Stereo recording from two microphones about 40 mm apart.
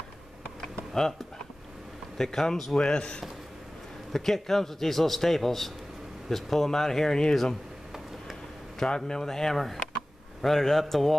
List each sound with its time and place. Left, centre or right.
0.6 s computer keyboard: centre
2.1 s a man's voice: centre
2.8 s speech: left
4.1 s a man's voice: centre
8.7 s a man's voice: centre